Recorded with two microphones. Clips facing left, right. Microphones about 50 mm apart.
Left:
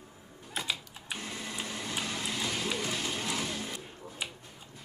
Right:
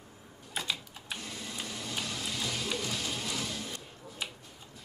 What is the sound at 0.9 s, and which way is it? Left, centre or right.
Printer, centre.